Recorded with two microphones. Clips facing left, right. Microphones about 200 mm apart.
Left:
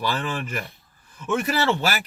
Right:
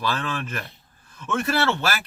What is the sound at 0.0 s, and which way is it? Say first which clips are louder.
Speech: left 1 dB; 15° left (ahead or behind).